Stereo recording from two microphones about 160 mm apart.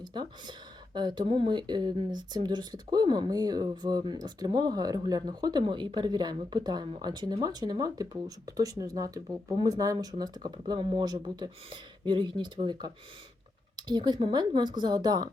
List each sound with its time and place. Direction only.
0.0 s speech: 25° right (ahead or behind)